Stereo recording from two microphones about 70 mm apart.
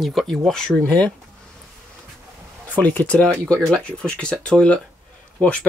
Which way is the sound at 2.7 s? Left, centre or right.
Left.